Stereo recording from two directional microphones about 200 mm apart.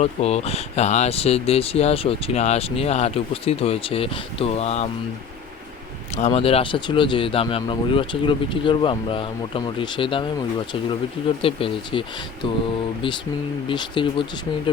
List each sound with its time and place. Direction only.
0.0 s speech: 30° left (ahead or behind)
6.1 s speech: 30° left (ahead or behind)
11.4 s speech: 25° left (ahead or behind)
13.7 s speech: 25° left (ahead or behind)